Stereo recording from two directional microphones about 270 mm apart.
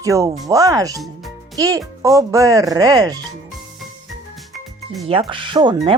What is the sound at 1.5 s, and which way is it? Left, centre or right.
Speech, centre.